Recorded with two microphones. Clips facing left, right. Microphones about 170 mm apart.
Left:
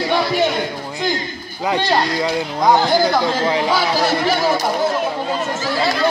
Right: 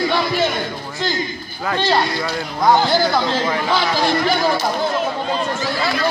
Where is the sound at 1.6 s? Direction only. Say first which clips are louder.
Left 1 dB; 15° left (ahead or behind).